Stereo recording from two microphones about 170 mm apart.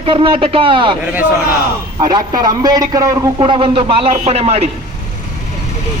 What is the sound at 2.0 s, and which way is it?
A man's voice, 25° right (ahead or behind).